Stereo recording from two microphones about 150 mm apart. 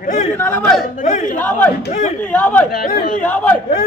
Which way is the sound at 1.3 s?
10° left (ahead or behind).